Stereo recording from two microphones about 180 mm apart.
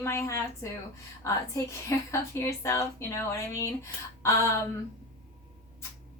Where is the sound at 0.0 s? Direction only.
15° left (ahead or behind).